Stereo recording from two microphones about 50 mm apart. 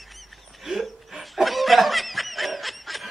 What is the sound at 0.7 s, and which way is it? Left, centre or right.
Snicker, centre.